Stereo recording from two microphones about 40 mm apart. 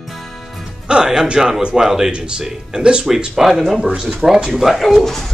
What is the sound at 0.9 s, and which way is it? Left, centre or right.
Speech, centre.